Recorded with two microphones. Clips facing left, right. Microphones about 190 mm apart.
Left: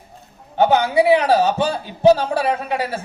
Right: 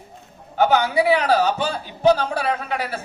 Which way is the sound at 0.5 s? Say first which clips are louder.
Left 3 dB; 25° left (ahead or behind).